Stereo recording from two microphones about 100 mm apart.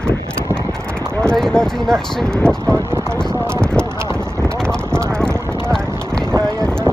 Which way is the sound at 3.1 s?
10° left (ahead or behind).